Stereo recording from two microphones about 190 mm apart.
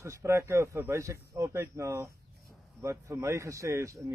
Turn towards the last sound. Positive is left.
turn(degrees=-15)  # may be behind; listen again after turning